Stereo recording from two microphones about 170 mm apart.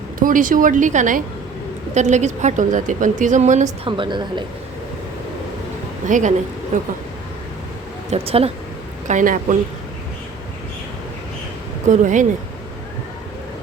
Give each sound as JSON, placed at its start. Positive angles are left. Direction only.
{"t": 0.2, "sound": "a woman's voice", "side_deg": -55}
{"t": 3.8, "sound": "a woman's voice", "side_deg": -30}
{"t": 6.1, "sound": "a woman's voice", "side_deg": -45}
{"t": 8.1, "sound": "speech", "side_deg": -35}
{"t": 9.0, "sound": "a woman's voice", "side_deg": -50}
{"t": 11.9, "sound": "a woman's voice", "side_deg": -50}